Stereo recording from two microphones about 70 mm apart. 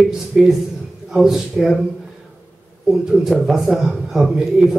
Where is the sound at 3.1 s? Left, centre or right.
Centre.